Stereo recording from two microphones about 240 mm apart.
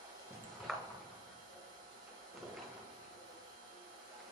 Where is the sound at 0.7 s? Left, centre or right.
Centre.